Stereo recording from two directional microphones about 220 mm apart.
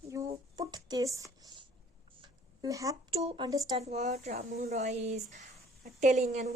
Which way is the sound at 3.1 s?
25° right (ahead or behind).